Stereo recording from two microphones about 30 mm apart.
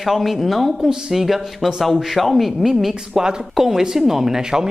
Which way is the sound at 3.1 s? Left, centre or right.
Right.